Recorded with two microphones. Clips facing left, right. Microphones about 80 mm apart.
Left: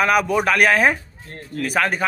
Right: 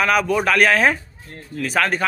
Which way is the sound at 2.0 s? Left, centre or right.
Left.